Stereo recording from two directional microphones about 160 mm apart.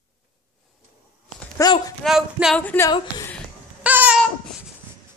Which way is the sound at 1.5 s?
25° left (ahead or behind).